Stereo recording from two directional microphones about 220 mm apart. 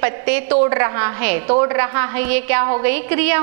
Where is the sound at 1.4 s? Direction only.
30° right (ahead or behind).